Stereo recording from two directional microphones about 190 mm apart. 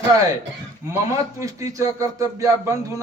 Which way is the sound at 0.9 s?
15° right (ahead or behind).